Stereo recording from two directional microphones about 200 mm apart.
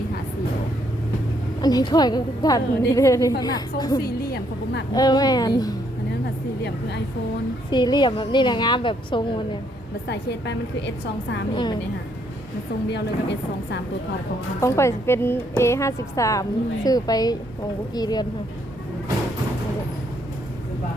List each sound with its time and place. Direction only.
1.6 s a woman's voice: 20° left (ahead or behind)
4.0 s music: 50° left (ahead or behind)
4.9 s a woman's voice: 20° left (ahead or behind)
7.7 s a woman's voice: 20° left (ahead or behind)
10.1 s a woman's voice: 60° left (ahead or behind)
11.5 s a woman's voice: 20° left (ahead or behind)
12.9 s a woman's voice: 60° left (ahead or behind)
14.6 s a woman's voice: 15° left (ahead or behind)